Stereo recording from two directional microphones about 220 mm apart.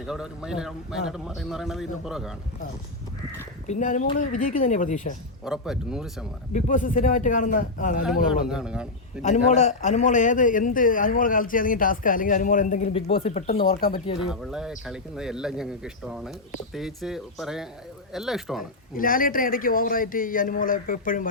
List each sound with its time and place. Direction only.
0.0 s a man's voice: 5° right (ahead or behind)
3.7 s a man's voice: 35° left (ahead or behind)
5.5 s a man's voice: 5° right (ahead or behind)
6.5 s a man's voice: 35° left (ahead or behind)
8.3 s a man's voice: 5° right (ahead or behind)
9.2 s a man's voice: 30° left (ahead or behind)
13.6 s a man's voice: 40° left (ahead or behind)
13.9 s speech: 25° left (ahead or behind)
14.3 s a man's voice: 5° right (ahead or behind)
18.9 s a man's voice: 40° left (ahead or behind)